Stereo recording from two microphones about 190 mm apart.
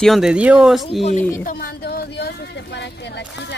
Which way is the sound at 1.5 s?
50° left (ahead or behind).